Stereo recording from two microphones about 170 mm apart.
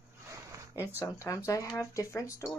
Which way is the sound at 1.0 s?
20° left (ahead or behind).